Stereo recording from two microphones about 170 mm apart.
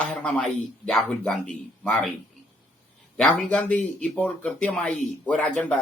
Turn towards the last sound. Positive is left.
turn(degrees=5)  # may be behind; listen again after turning